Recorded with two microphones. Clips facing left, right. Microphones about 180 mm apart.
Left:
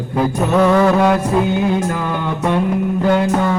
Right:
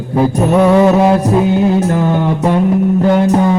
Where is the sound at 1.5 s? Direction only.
35° right (ahead or behind).